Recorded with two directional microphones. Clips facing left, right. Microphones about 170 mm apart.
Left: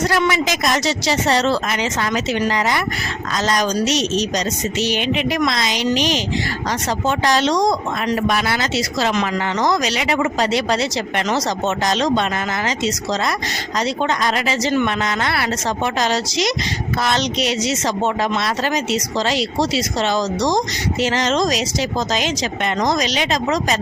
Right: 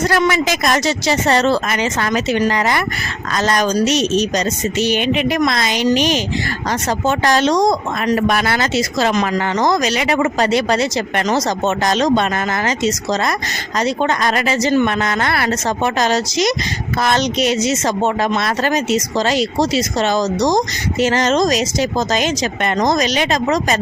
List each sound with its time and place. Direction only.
0.1 s speech: 50° right (ahead or behind)